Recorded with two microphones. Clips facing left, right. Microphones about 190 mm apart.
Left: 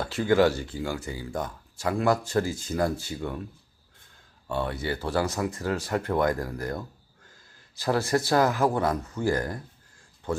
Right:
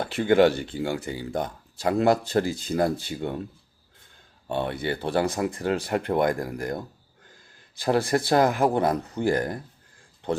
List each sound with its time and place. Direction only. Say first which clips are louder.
0.2 s speech: right 3 dB; 25° right (ahead or behind)
4.4 s speech: right 2 dB; 20° right (ahead or behind)
7.8 s speech: right 2 dB; 30° right (ahead or behind)
9.0 s speech: right 2 dB; 35° right (ahead or behind)